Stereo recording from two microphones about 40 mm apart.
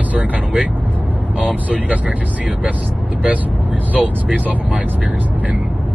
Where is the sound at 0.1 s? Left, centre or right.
Right.